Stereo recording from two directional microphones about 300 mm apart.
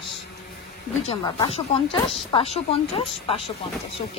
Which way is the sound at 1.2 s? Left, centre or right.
Centre.